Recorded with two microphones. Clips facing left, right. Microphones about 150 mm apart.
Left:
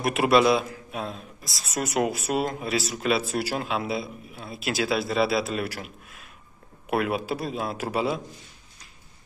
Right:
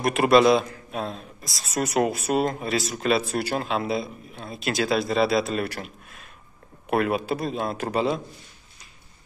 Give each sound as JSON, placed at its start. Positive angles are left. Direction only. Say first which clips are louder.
{"t": 0.0, "sound": "a man's voice", "louder": "right 2 dB", "side_deg": 5}